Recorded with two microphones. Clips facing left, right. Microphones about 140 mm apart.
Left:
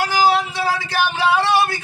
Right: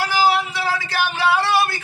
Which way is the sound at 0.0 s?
20° left (ahead or behind).